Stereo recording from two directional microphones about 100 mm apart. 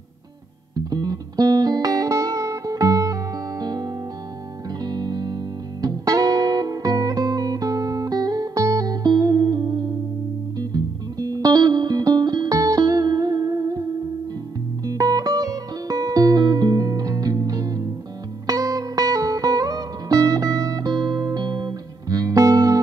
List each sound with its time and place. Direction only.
0.7 s music: 40° right (ahead or behind)
14.9 s music: 40° right (ahead or behind)